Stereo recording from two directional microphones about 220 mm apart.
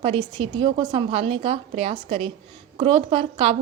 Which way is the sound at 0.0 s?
25° right (ahead or behind).